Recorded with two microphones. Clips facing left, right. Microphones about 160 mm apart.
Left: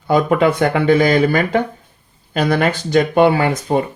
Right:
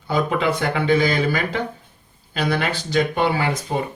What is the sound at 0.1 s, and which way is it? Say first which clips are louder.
Speech: left 7 dB; 50° left (ahead or behind).